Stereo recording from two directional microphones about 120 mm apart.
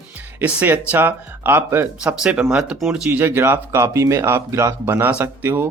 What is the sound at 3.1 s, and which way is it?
Speech, 15° right (ahead or behind).